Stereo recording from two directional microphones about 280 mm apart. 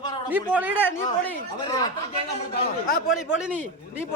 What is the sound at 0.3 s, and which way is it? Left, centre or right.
Speech, centre.